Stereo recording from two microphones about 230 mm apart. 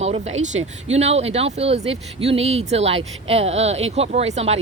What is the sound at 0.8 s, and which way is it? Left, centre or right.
Speech, right.